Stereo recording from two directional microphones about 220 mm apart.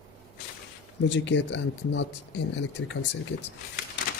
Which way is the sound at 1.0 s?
55° left (ahead or behind).